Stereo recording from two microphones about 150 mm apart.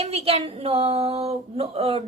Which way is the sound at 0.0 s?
40° right (ahead or behind).